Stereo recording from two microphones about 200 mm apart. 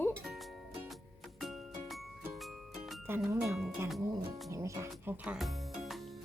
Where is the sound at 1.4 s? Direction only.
Centre (ahead or behind).